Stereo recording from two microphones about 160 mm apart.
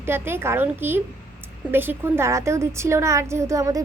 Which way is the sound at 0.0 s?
15° right (ahead or behind).